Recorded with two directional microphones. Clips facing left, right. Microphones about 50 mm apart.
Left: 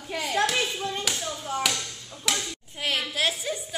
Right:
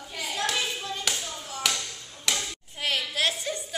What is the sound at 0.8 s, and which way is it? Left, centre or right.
Tap, left.